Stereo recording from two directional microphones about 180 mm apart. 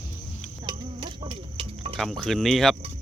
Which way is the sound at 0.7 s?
30° right (ahead or behind).